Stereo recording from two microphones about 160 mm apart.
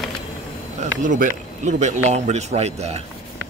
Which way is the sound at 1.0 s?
55° right (ahead or behind).